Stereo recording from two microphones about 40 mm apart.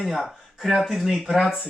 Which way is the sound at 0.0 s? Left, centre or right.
Centre.